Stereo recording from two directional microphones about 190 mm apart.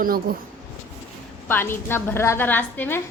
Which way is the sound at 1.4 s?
10° left (ahead or behind).